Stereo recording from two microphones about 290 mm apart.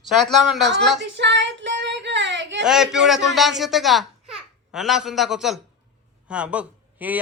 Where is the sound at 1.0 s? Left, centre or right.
Right.